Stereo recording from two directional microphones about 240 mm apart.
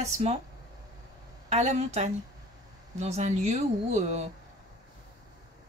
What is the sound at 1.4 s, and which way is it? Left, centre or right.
Speech, right.